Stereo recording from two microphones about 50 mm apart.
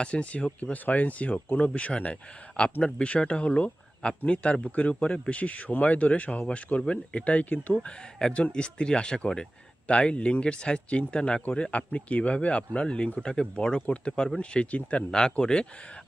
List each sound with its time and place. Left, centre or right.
0.0 s speech: left
15.1 s a man's voice: centre